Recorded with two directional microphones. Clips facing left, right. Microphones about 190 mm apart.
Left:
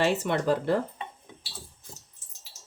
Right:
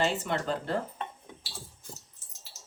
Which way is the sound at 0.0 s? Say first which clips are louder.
Left 4 dB; 65° left (ahead or behind).